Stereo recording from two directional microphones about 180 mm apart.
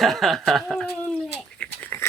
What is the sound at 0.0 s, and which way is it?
Speech, centre (ahead or behind).